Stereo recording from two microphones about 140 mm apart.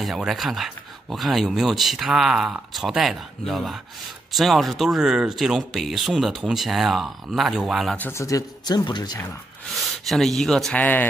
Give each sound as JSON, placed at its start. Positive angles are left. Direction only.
{"t": 0.0, "sound": "speech", "side_deg": 0}
{"t": 8.0, "sound": "speech", "side_deg": 20}
{"t": 9.8, "sound": "speech", "side_deg": 0}